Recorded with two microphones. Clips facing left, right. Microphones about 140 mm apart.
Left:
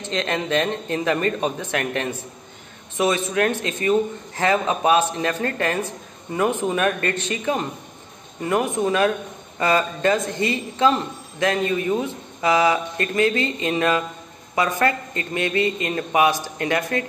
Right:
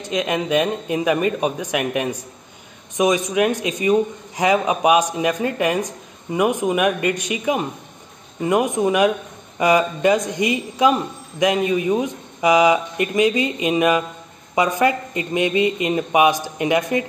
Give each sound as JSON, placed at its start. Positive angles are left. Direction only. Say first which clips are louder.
{"t": 0.0, "sound": "a man's voice", "louder": "right 3 dB", "side_deg": -10}